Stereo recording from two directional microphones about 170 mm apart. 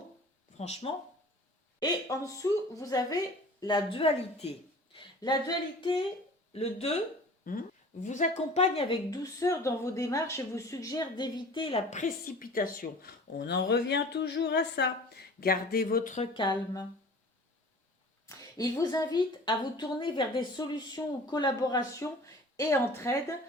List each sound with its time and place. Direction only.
0.5 s speech: 40° left (ahead or behind)
1.8 s a woman's voice: 20° left (ahead or behind); by 4.5 s 35° left (ahead or behind)
4.9 s a woman's voice: 25° left (ahead or behind)
6.5 s a woman's voice: 35° left (ahead or behind)
7.5 s speech: 55° left (ahead or behind)
8.5 s a woman's voice: 35° left (ahead or behind)
9.0 s speech: 20° left (ahead or behind); by 16.1 s 60° left (ahead or behind)
16.1 s a woman's voice: 30° left (ahead or behind)
18.3 s a woman's voice: 20° left (ahead or behind)